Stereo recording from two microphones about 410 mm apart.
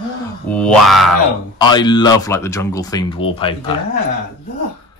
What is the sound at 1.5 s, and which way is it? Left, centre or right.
Speech, centre.